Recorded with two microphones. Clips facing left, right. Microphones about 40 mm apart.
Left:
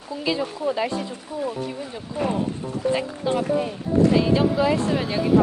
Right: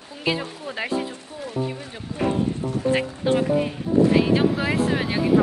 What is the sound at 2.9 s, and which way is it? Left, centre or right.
Speech, right.